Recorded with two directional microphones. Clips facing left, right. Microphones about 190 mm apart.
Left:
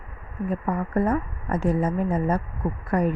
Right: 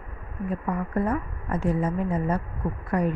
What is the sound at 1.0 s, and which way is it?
A woman's voice, 45° left (ahead or behind).